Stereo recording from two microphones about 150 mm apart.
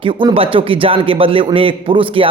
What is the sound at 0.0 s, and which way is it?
A man's voice, 35° right (ahead or behind).